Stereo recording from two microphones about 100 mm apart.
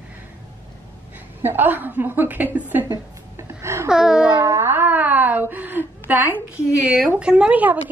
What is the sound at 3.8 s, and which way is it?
Speech, 5° right (ahead or behind).